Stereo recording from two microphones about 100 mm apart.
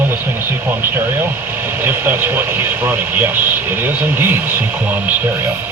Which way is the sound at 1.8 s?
25° right (ahead or behind).